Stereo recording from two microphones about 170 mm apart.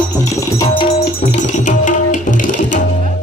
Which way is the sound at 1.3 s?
45° left (ahead or behind).